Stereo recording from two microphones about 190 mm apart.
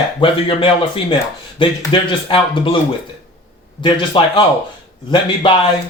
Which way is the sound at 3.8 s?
25° left (ahead or behind).